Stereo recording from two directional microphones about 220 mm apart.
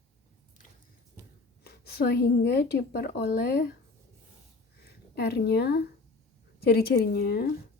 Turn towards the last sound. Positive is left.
turn(degrees=45)  # may be behind; listen again after turning